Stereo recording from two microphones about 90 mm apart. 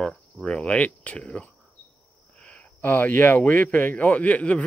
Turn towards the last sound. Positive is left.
turn(degrees=15)  # may be behind; listen again after turning